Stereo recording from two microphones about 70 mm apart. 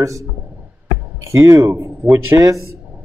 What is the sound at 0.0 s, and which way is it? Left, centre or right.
Speech, right.